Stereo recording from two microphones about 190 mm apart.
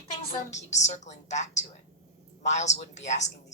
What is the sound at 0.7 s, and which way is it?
Speech, 35° left (ahead or behind).